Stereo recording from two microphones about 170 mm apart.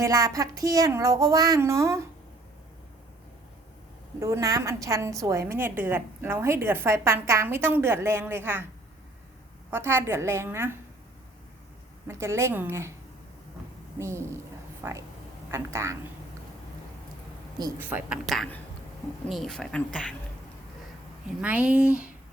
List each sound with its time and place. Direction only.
0.0 s speech: 20° right (ahead or behind)
4.2 s a woman's voice: 20° right (ahead or behind)
9.6 s a woman's voice: 15° right (ahead or behind)
12.0 s a woman's voice: 15° right (ahead or behind)
14.0 s a woman's voice: 15° right (ahead or behind)
17.7 s a woman's voice: 10° right (ahead or behind)
18.3 s speech: centre (ahead or behind)
21.4 s a woman's voice: 10° right (ahead or behind)